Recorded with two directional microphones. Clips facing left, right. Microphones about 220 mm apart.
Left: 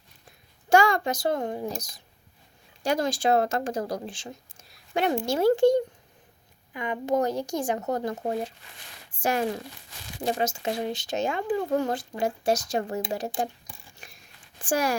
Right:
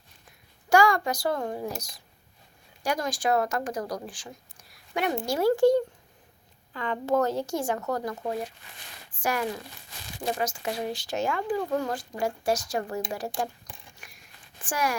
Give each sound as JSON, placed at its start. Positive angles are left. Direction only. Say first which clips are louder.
{"t": 0.7, "sound": "a child's voice", "louder": "left 1 dB", "side_deg": 25}
{"t": 2.8, "sound": "speech", "louder": "left 3 dB", "side_deg": 25}
{"t": 14.0, "sound": "a sound", "louder": "left 2 dB", "side_deg": 25}
{"t": 14.7, "sound": "speech", "louder": "left 4 dB", "side_deg": 30}